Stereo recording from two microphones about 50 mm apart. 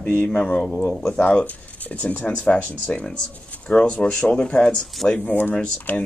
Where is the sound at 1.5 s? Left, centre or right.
Left.